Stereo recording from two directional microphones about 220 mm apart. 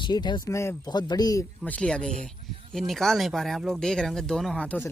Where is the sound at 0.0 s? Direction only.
20° left (ahead or behind).